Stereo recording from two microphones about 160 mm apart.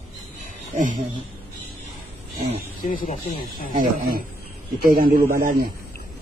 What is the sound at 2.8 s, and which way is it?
Speech, 60° left (ahead or behind).